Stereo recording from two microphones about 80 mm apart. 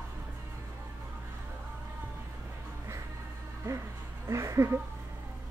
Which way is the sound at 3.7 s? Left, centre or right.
Right.